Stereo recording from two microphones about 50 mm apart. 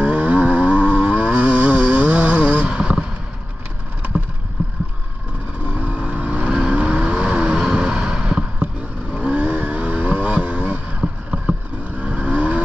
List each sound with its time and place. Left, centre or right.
0.0 s vehicle: right
2.6 s a sound: right
5.8 s vehicle: right